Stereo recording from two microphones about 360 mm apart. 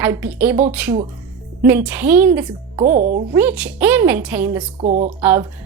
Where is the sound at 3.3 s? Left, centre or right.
Centre.